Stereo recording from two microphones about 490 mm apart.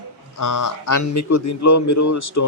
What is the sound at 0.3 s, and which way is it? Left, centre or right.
Speech, left.